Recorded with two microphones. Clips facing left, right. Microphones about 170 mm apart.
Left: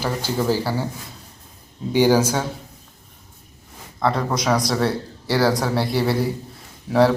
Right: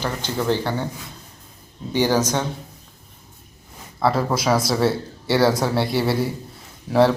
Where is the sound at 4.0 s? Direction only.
5° right (ahead or behind).